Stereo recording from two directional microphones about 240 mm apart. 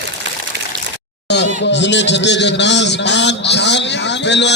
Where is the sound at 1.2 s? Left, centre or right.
Left.